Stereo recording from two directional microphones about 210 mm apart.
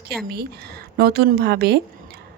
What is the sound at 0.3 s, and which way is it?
Speech, 50° right (ahead or behind).